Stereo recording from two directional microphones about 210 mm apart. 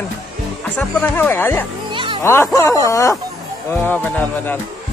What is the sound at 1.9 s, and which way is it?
Music, 25° right (ahead or behind).